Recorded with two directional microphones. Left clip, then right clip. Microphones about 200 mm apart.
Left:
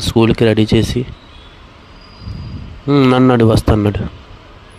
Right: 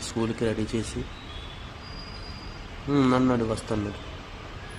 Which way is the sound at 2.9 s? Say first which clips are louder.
Left 12 dB; 35° left (ahead or behind).